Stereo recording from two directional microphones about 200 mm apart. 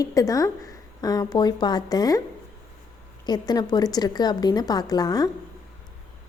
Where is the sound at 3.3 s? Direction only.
20° left (ahead or behind).